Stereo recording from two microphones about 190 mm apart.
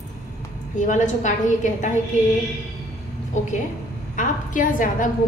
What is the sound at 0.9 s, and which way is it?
A woman's voice, 40° left (ahead or behind).